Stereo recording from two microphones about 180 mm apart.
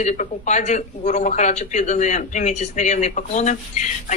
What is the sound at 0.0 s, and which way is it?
A woman's voice, 40° left (ahead or behind).